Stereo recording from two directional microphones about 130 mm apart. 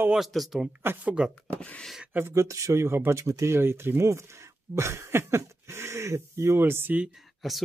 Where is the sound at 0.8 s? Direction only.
15° right (ahead or behind).